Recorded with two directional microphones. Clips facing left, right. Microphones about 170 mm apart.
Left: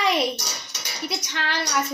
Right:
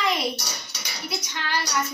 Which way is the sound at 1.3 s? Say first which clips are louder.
Left 3 dB; 80° left.